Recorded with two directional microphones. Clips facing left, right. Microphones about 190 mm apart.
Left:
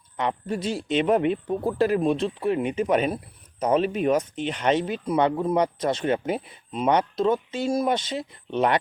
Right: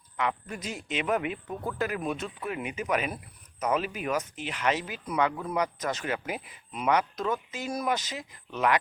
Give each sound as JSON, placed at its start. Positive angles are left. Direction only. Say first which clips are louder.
{"t": 0.2, "sound": "speech", "louder": "left 5 dB", "side_deg": 30}